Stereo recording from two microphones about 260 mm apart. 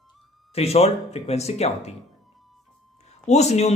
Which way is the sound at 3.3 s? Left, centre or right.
Left.